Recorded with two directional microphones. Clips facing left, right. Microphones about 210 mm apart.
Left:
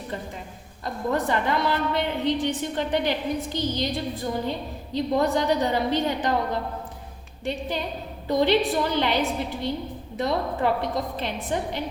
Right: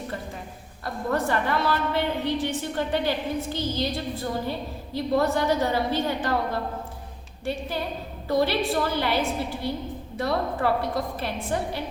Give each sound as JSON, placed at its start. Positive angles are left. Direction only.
{"t": 1.1, "sound": "a woman's voice", "side_deg": 20}
{"t": 8.3, "sound": "a woman's voice", "side_deg": 20}